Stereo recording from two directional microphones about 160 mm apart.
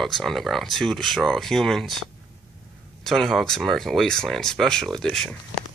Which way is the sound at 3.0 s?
Centre (ahead or behind).